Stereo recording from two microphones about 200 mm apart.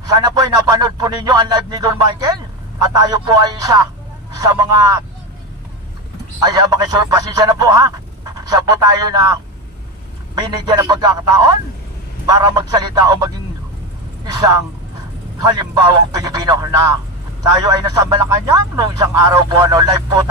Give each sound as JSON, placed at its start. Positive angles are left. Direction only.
{"t": 0.0, "sound": "speech", "side_deg": -20}
{"t": 6.4, "sound": "speech", "side_deg": -20}
{"t": 10.5, "sound": "speech", "side_deg": -20}